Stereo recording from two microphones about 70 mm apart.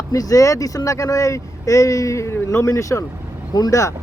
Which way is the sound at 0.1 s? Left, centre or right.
Left.